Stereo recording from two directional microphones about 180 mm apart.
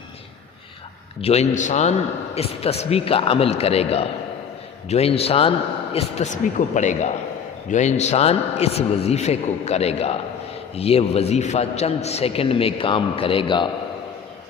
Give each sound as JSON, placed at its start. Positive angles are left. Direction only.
{"t": 1.2, "sound": "a man's voice", "side_deg": 35}